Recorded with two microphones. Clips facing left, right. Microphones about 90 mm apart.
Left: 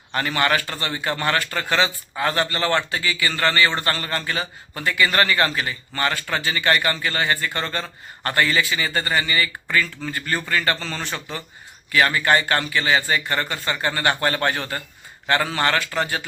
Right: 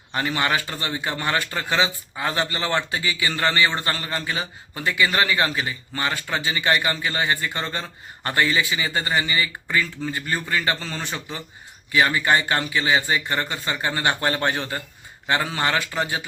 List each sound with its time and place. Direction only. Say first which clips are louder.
0.1 s a man's voice: left 2 dB; 15° right (ahead or behind)